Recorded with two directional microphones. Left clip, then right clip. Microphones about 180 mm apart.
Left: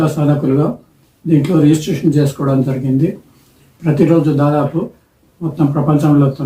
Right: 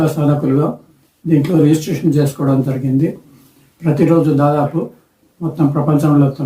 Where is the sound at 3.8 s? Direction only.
5° right (ahead or behind).